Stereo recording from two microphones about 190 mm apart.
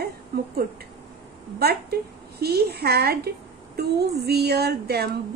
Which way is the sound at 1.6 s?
55° right (ahead or behind).